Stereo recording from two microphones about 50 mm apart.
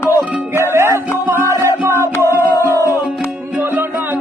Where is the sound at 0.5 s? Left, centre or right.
Right.